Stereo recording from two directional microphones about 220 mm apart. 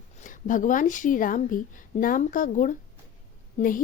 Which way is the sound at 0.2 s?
35° left (ahead or behind).